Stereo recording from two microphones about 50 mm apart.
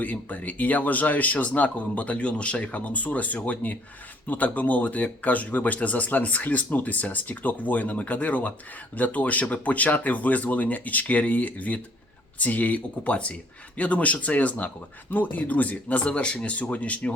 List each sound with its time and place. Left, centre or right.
0.0 s speech: left
16.0 s speech: left